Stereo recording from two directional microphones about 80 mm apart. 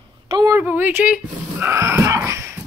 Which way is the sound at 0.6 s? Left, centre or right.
Right.